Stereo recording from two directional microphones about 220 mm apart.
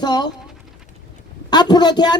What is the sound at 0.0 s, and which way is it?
Speech, 20° left (ahead or behind).